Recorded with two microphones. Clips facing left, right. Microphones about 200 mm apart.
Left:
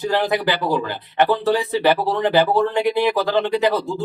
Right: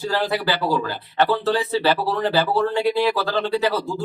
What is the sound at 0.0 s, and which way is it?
Speech, 20° left (ahead or behind).